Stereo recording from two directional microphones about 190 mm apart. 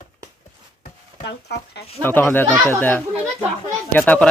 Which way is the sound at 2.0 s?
10° left (ahead or behind).